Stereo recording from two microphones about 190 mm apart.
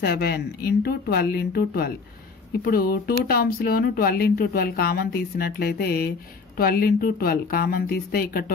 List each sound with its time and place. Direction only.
0.0 s speech: 55° left (ahead or behind)